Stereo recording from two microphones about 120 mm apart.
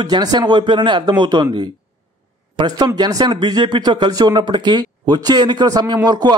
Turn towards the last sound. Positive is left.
turn(degrees=-35)  # may be behind; listen again after turning